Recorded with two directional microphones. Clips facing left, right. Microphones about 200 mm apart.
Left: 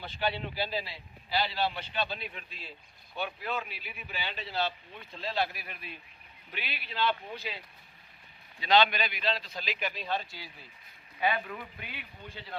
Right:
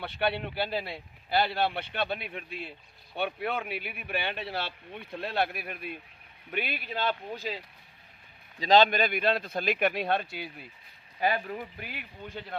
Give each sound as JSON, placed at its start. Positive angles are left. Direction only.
{"t": 0.0, "sound": "a man's voice", "side_deg": -60}
{"t": 8.6, "sound": "a man's voice", "side_deg": -40}
{"t": 11.2, "sound": "speech", "side_deg": -40}